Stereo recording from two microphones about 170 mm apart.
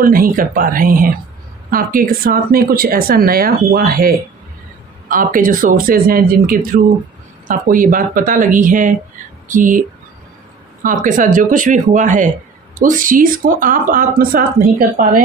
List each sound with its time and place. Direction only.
0.0 s speech: 55° right (ahead or behind)